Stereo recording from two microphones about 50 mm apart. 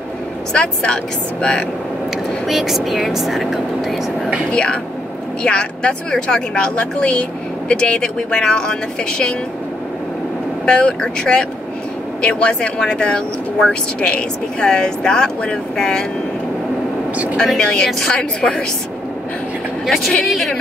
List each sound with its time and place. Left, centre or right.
0.5 s speech: centre
2.4 s speech: centre
4.5 s speech: centre
10.6 s speech: centre
17.6 s speech: centre
19.9 s speech: centre